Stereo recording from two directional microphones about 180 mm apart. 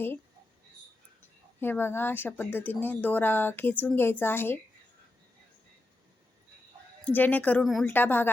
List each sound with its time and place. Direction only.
1.6 s speech: 10° left (ahead or behind)
7.0 s speech: 10° left (ahead or behind)